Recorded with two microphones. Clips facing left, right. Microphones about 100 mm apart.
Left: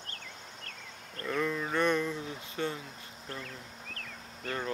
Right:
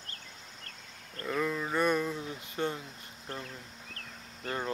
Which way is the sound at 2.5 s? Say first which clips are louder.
Right 1 dB; 45° right (ahead or behind).